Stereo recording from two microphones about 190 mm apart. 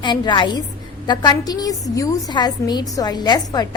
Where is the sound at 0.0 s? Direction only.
25° left (ahead or behind).